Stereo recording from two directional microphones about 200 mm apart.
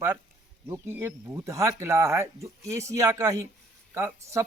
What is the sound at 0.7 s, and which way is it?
Speech, 10° right (ahead or behind).